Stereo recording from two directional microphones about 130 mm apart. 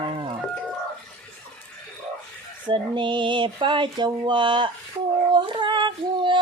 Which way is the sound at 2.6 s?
35° right (ahead or behind).